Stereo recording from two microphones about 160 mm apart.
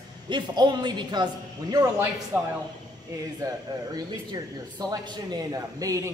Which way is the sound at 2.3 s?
10° right (ahead or behind).